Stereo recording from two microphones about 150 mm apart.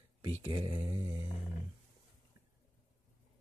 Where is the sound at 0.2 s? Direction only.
35° right (ahead or behind).